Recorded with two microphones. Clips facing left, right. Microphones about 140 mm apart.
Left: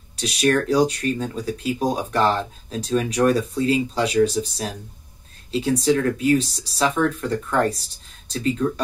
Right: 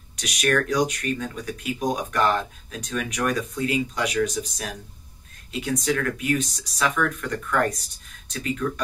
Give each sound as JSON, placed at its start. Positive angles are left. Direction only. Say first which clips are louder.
{"t": 0.1, "sound": "speech", "louder": "left 4 dB", "side_deg": 30}